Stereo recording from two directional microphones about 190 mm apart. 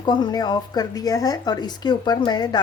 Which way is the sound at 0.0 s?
20° left (ahead or behind).